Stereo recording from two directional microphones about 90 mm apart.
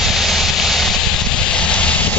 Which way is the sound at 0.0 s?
Centre (ahead or behind).